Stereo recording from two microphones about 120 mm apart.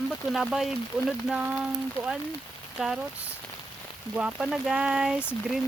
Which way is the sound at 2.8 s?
5° right (ahead or behind).